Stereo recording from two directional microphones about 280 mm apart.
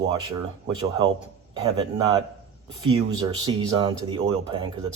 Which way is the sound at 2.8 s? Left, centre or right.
Centre.